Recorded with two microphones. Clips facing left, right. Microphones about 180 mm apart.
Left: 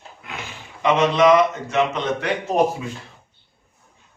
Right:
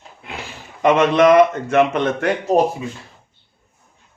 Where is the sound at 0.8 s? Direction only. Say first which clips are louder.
Right 3 dB; 55° right (ahead or behind).